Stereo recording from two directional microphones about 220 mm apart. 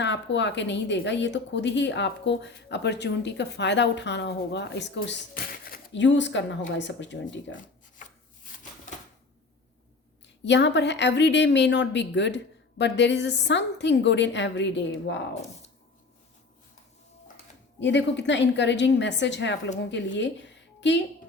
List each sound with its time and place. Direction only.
0.0 s speech: 55° left (ahead or behind)
10.4 s speech: 55° left (ahead or behind)
17.7 s speech: 55° left (ahead or behind)